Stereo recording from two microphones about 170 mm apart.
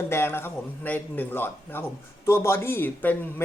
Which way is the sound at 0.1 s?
15° left (ahead or behind).